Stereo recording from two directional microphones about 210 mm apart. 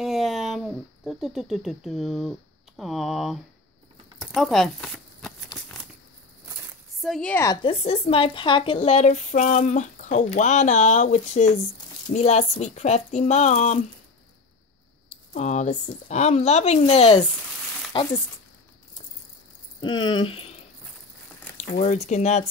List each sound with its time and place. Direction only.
0.0 s a sound: centre (ahead or behind)
2.8 s a woman's voice: centre (ahead or behind)
4.2 s crumpling: centre (ahead or behind)
7.0 s a woman's voice: centre (ahead or behind)
7.6 s a woman's voice: 30° left (ahead or behind)
15.3 s a woman's voice: 35° left (ahead or behind)
19.8 s speech: 20° left (ahead or behind)
21.5 s a woman's voice: 35° left (ahead or behind)